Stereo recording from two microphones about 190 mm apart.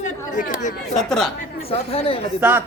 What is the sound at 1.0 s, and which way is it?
Speech, centre (ahead or behind).